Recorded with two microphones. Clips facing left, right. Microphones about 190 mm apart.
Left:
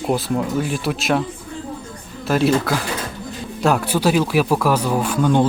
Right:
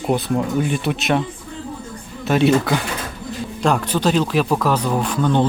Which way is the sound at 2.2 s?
Centre (ahead or behind).